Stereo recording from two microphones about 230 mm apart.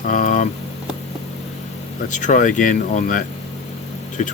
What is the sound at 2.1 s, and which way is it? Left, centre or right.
Speech, left.